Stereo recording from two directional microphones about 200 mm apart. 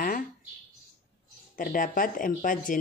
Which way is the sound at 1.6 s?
45° left (ahead or behind).